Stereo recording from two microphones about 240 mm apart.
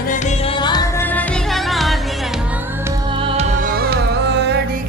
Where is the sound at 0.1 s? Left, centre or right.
Left.